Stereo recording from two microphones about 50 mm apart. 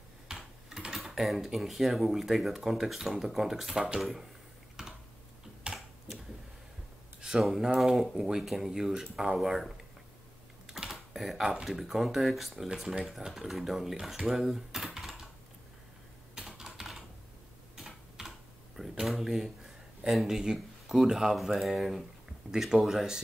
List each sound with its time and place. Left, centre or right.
0.3 s speech: centre
4.8 s typing: centre
7.2 s a sound: centre
7.4 s speech: centre
16.3 s typing: centre
19.0 s speech: centre